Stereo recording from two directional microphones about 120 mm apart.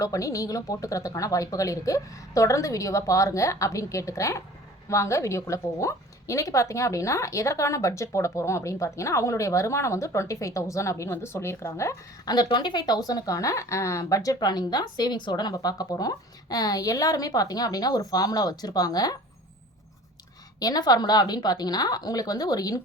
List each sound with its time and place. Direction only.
0.0 s a woman's voice: 25° left (ahead or behind)
12.5 s speech: 40° left (ahead or behind)
20.6 s speech: 35° left (ahead or behind)